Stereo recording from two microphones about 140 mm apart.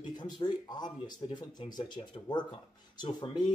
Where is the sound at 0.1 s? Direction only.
30° left (ahead or behind).